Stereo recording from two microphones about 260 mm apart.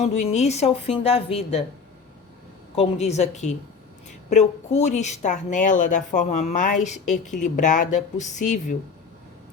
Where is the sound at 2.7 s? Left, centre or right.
Left.